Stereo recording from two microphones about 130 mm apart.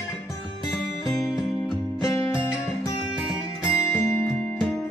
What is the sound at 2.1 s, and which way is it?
Music, 25° left (ahead or behind).